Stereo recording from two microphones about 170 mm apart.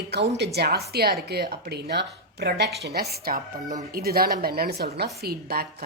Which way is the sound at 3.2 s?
55° right (ahead or behind).